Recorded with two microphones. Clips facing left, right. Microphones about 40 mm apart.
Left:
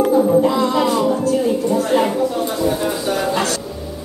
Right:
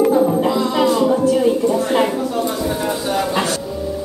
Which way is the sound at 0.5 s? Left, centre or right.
Centre.